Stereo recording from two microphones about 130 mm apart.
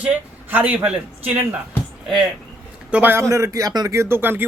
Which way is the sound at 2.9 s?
15° right (ahead or behind).